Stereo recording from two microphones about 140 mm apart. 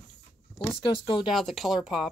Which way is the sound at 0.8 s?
35° left (ahead or behind).